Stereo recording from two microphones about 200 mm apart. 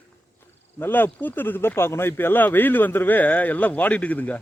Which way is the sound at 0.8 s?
10° left (ahead or behind).